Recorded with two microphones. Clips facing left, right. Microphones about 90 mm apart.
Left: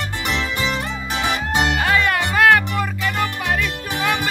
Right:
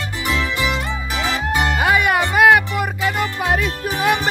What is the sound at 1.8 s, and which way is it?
Music, 15° right (ahead or behind).